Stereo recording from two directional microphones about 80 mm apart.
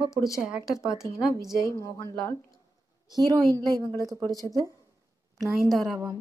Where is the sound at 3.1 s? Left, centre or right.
Right.